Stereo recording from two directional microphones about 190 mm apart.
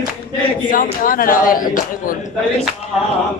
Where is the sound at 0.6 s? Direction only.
45° left (ahead or behind).